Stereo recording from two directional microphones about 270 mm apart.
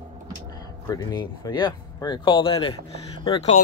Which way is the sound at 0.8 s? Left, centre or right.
Centre.